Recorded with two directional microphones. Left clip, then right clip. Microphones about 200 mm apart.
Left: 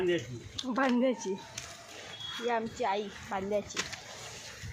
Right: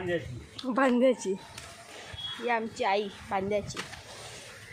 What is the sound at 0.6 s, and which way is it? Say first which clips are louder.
Speech: right 5 dB; 30° right (ahead or behind).